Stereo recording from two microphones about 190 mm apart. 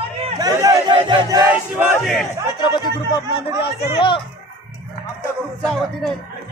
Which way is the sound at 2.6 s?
25° left (ahead or behind).